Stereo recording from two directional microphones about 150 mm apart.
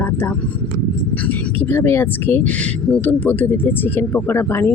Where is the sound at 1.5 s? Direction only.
15° left (ahead or behind).